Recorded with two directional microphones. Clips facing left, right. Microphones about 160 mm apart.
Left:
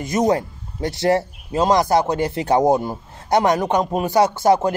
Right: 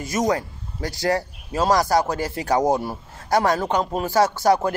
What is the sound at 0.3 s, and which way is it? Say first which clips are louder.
A man's voice: left 4 dB; 25° left (ahead or behind).